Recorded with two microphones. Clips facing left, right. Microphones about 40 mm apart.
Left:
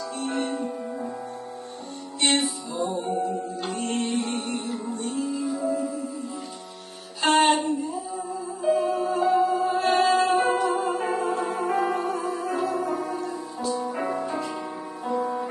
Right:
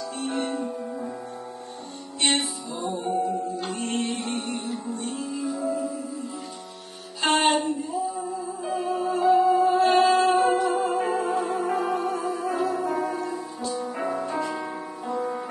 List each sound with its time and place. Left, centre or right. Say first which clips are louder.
0.4 s music: even; centre
2.4 s music: left 3 dB; centre
7.2 s music: left 3 dB; centre
7.5 s music: even; centre